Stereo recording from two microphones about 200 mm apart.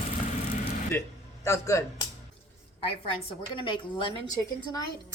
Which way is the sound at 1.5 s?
15° left (ahead or behind).